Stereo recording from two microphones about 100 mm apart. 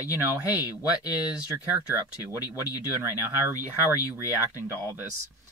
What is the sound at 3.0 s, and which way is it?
Speech, 20° right (ahead or behind).